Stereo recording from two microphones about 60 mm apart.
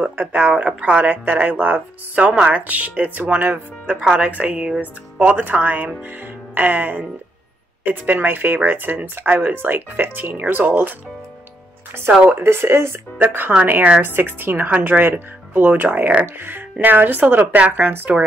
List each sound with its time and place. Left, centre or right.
0.0 s speech: right
12.2 s speech: right
12.4 s speech: right
13.2 s speech: right